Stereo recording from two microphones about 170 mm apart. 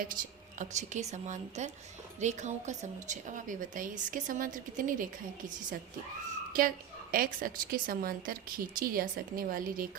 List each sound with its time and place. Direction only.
0.6 s a woman's voice: 45° right (ahead or behind)
6.5 s a woman's voice: 55° right (ahead or behind)